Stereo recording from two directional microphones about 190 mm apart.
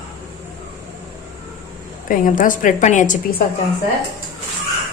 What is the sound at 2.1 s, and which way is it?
A woman's voice, 45° left (ahead or behind).